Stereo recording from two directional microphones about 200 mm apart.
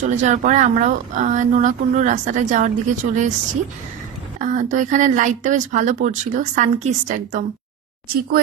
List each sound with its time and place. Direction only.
0.2 s speech: 35° right (ahead or behind)
4.4 s speech: 40° right (ahead or behind)